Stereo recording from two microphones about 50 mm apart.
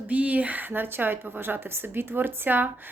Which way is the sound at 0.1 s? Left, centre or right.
Right.